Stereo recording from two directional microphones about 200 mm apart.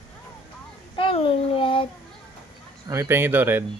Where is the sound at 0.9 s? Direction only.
25° left (ahead or behind).